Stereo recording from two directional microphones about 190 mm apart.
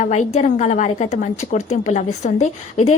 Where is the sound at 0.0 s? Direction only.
40° left (ahead or behind).